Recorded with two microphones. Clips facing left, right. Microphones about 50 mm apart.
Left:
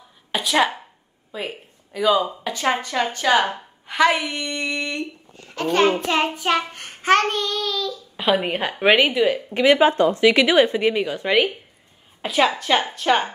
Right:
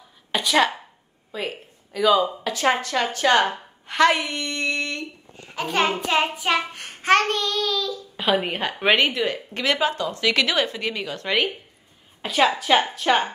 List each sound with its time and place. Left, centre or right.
0.3 s a woman's voice: centre
5.5 s child singing: centre
9.8 s speech: left
10.2 s speech: centre
12.2 s child singing: centre